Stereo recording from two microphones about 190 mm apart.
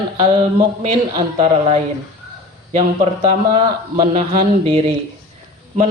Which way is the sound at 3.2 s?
30° right (ahead or behind).